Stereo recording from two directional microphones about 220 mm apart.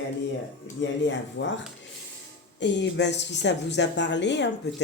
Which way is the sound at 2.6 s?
55° left (ahead or behind).